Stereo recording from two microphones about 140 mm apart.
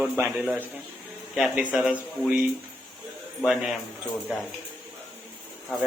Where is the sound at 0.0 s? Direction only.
10° right (ahead or behind).